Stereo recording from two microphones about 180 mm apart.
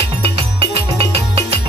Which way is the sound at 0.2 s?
30° right (ahead or behind).